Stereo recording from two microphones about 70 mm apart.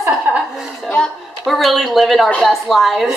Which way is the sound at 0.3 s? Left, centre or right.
Right.